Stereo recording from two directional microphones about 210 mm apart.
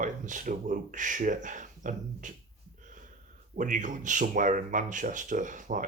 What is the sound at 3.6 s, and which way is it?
Speech, 40° right (ahead or behind).